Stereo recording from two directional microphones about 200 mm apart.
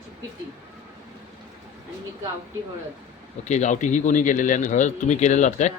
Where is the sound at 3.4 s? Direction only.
35° left (ahead or behind).